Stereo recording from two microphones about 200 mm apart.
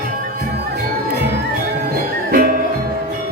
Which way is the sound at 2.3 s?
45° right (ahead or behind).